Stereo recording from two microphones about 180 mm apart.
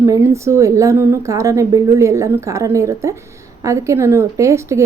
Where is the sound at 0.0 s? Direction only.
15° right (ahead or behind).